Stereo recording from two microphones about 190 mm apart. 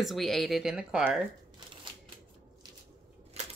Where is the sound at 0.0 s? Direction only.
Centre (ahead or behind).